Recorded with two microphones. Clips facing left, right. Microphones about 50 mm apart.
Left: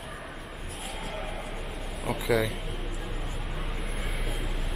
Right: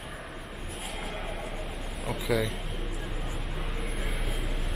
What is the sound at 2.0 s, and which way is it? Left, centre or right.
Speech, centre.